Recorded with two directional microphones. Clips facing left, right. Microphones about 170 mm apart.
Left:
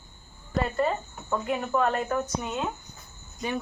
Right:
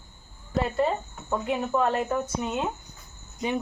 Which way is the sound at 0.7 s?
15° right (ahead or behind).